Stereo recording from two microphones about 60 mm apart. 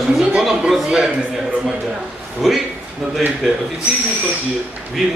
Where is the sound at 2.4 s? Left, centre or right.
Centre.